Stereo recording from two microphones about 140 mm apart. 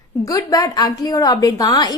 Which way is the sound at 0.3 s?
25° left (ahead or behind).